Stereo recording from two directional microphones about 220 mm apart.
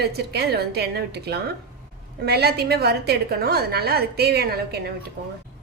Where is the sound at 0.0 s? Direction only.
45° right (ahead or behind).